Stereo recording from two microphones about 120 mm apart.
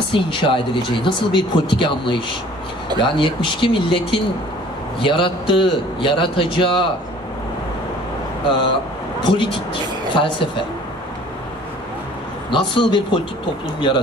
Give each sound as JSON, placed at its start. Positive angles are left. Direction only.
{"t": 0.1, "sound": "speech", "side_deg": 45}
{"t": 8.5, "sound": "speech", "side_deg": 45}
{"t": 12.4, "sound": "speech", "side_deg": 45}